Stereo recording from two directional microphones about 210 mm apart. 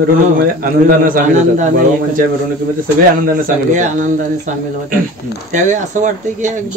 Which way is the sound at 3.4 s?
35° right (ahead or behind).